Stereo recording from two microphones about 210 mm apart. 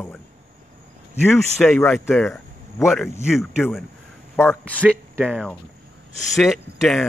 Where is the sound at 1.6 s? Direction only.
5° left (ahead or behind).